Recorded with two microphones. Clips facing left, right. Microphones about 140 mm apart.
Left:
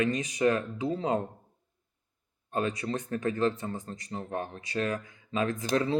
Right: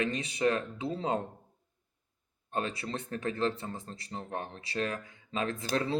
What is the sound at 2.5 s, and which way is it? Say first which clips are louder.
Speech: left 4 dB; 30° right (ahead or behind).